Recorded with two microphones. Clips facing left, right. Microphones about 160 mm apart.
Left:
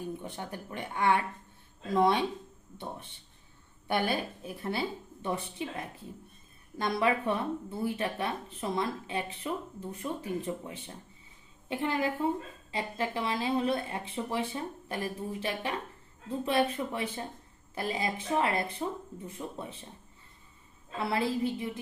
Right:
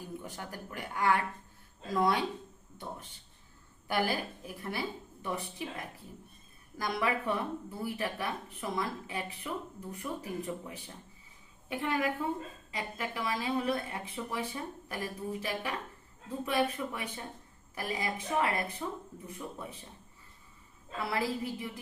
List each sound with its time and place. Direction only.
0.0 s speech: 20° left (ahead or behind)
21.0 s speech: 25° left (ahead or behind)